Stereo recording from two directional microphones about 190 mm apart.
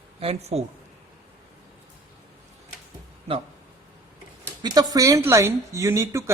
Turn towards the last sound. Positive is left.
turn(degrees=-15)  # may be behind; listen again after turning